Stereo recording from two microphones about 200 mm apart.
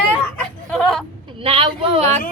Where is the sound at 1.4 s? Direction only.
30° right (ahead or behind).